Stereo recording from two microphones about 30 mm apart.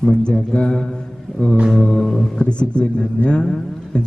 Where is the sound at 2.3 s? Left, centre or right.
Left.